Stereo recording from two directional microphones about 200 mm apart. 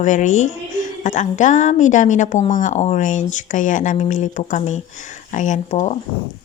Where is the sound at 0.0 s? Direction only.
40° left (ahead or behind).